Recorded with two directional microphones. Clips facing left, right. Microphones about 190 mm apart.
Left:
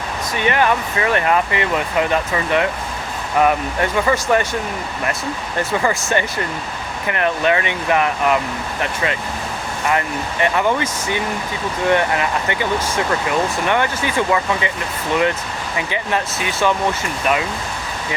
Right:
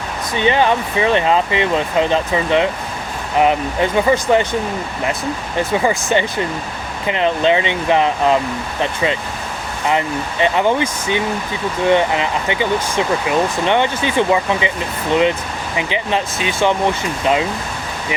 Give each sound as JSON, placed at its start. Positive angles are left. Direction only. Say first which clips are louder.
{"t": 0.3, "sound": "speech", "louder": "right 3 dB", "side_deg": -25}
{"t": 5.7, "sound": "speech", "louder": "right 3 dB", "side_deg": -15}
{"t": 10.4, "sound": "speech", "louder": "right 2 dB", "side_deg": -20}